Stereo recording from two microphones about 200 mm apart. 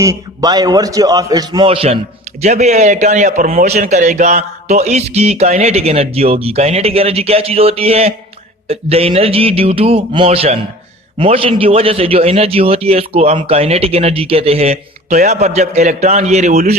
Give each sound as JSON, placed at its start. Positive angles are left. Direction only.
{"t": 0.0, "sound": "a man's voice", "side_deg": -20}